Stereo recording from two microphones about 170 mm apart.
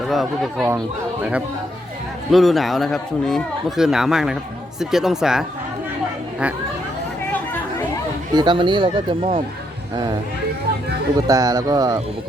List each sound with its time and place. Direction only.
0.1 s speech: centre (ahead or behind)
2.3 s speech: centre (ahead or behind)
8.4 s speech: 25° right (ahead or behind)
11.3 s speech: 20° right (ahead or behind)